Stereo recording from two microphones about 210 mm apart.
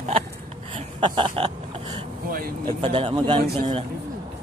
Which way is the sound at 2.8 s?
25° right (ahead or behind).